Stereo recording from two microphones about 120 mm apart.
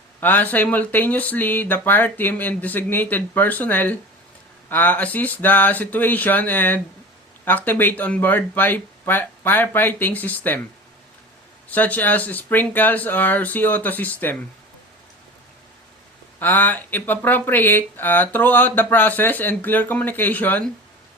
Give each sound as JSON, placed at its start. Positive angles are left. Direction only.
{"t": 0.2, "sound": "speech", "side_deg": 15}
{"t": 11.7, "sound": "speech", "side_deg": 15}
{"t": 16.4, "sound": "speech", "side_deg": 15}